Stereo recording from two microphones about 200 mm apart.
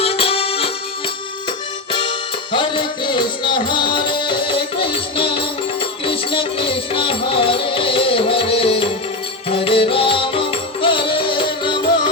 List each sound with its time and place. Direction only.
0.0 s accordion: 30° left (ahead or behind)
1.9 s music: 25° left (ahead or behind)